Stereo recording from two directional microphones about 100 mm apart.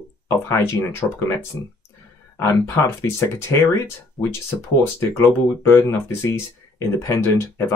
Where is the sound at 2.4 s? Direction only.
25° left (ahead or behind).